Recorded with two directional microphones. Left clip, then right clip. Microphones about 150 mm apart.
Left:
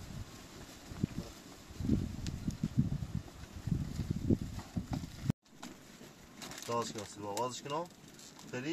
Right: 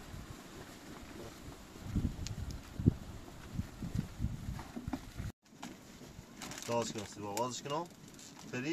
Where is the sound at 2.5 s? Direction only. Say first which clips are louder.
Left 7 dB; 40° left (ahead or behind).